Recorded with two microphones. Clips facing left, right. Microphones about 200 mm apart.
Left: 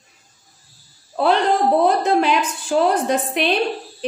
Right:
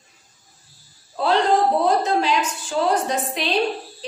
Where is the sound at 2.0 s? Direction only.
60° left (ahead or behind).